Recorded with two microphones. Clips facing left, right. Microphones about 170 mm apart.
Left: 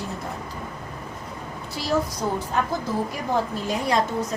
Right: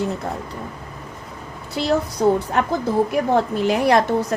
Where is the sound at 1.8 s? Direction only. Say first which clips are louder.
Right 9 dB; 70° right (ahead or behind).